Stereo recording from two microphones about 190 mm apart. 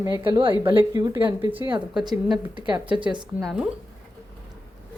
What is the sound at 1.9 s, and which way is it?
Speech, centre (ahead or behind).